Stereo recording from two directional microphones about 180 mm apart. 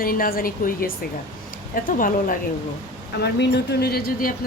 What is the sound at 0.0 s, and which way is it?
Speech, 55° left (ahead or behind).